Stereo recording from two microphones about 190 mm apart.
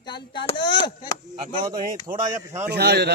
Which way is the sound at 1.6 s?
45° right (ahead or behind).